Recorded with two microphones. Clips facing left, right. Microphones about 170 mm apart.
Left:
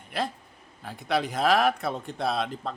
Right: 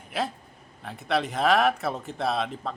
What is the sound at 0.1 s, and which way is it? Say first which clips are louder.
Speech: right 1 dB; 5° right (ahead or behind).